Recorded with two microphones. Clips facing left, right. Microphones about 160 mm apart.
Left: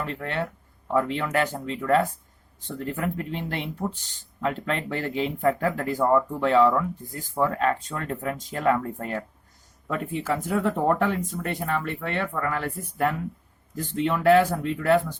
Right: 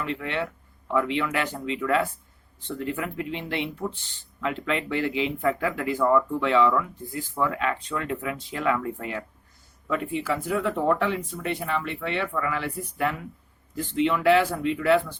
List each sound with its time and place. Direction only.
0.0 s speech: 40° left (ahead or behind)